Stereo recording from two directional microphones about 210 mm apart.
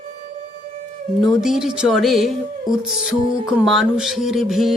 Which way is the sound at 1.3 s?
Centre (ahead or behind).